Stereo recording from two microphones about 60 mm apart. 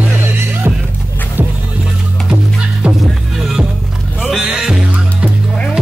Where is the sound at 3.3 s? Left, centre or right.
Centre.